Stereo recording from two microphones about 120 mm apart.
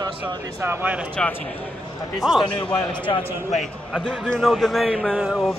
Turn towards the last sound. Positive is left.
turn(degrees=0)  # may be behind; listen again after turning